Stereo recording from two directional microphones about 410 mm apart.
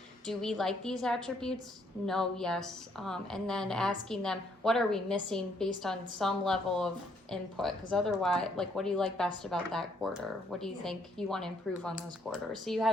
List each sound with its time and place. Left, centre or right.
0.3 s a woman's voice: centre